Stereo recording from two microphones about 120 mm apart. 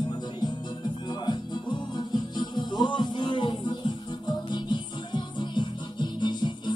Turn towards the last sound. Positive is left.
turn(degrees=40)  # may be behind; listen again after turning